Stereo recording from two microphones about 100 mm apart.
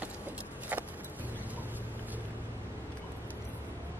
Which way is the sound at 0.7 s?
15° right (ahead or behind).